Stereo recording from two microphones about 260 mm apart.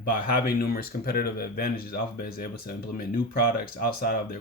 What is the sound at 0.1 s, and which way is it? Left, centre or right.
Speech, left.